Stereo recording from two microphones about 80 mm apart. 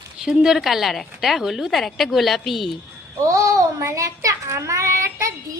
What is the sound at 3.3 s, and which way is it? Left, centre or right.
A child's voice, right.